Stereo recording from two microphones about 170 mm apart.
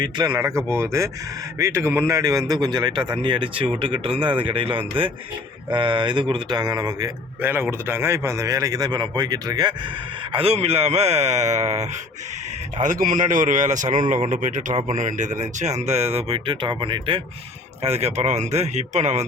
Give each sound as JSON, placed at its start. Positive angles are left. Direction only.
{"t": 0.0, "sound": "speech", "side_deg": -25}
{"t": 10.3, "sound": "a man's voice", "side_deg": -35}